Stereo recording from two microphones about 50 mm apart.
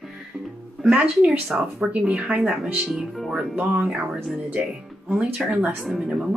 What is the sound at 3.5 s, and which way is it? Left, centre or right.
Speech, right.